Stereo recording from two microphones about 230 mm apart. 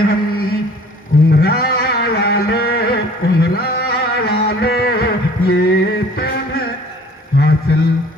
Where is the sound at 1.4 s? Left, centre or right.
Left.